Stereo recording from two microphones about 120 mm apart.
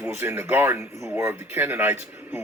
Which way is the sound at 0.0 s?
20° right (ahead or behind).